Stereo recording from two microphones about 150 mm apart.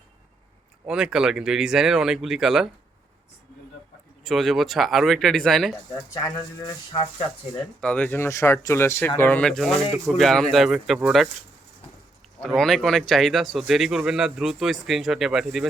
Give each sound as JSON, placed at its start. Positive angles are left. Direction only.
{"t": 0.9, "sound": "speech", "side_deg": -5}
{"t": 4.2, "sound": "speech", "side_deg": 0}
{"t": 5.9, "sound": "speech", "side_deg": 20}
{"t": 6.9, "sound": "speech", "side_deg": 40}
{"t": 7.8, "sound": "speech", "side_deg": 10}
{"t": 12.4, "sound": "speech", "side_deg": 5}